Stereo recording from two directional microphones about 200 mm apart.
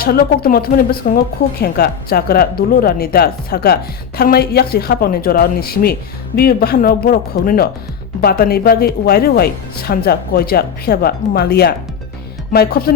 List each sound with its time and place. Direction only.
0.0 s speech: 50° left (ahead or behind)